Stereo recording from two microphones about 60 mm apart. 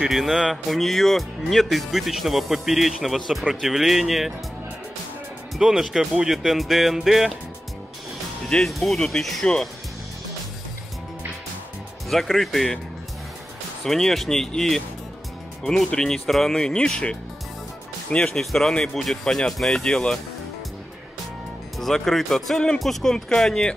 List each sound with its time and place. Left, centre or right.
0.0 s speech: centre
5.6 s speech: centre
8.5 s speech: centre
12.1 s speech: centre
13.8 s speech: centre
18.4 s speech: centre
21.7 s speech: centre